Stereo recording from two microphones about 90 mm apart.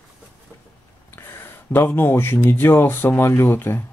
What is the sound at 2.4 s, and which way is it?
Speech, 25° left (ahead or behind).